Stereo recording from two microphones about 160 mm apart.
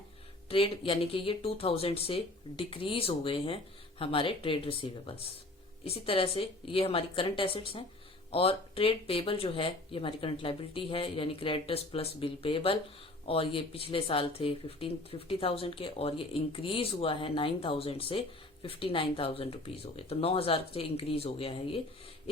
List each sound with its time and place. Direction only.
0.5 s speech: 35° left (ahead or behind)